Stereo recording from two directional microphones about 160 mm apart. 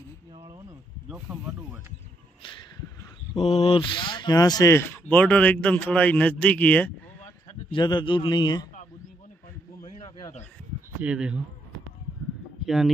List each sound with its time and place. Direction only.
0.3 s a sound: 30° right (ahead or behind)
1.1 s speech: 10° right (ahead or behind)
3.3 s speech: 40° left (ahead or behind); by 7.3 s 10° left (ahead or behind)
7.7 s a man's voice: 30° left (ahead or behind)
9.8 s a sound: 35° left (ahead or behind)
11.0 s speech: 5° right (ahead or behind)
12.6 s speech: 5° right (ahead or behind)